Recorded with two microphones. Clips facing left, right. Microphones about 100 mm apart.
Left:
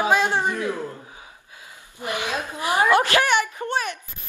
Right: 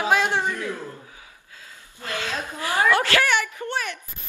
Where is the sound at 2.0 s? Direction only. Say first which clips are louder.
Left 3 dB; 15° left (ahead or behind).